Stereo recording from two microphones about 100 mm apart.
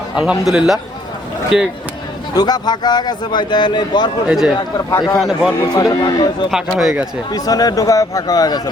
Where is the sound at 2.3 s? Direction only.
40° left (ahead or behind).